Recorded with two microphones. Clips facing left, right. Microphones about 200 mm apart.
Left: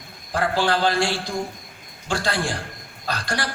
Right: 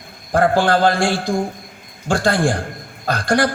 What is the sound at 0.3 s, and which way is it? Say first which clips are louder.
A man's voice: right 7 dB; 50° right (ahead or behind).